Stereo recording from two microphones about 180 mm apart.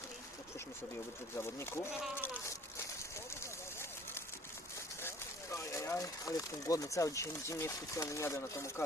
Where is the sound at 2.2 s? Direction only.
15° left (ahead or behind).